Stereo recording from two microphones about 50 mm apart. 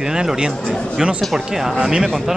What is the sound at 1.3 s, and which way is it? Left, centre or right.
Speech, centre.